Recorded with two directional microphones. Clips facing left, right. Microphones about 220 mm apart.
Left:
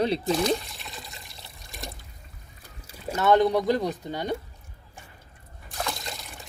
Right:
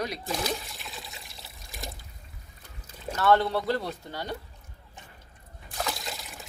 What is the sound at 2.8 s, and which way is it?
Speech, 15° left (ahead or behind).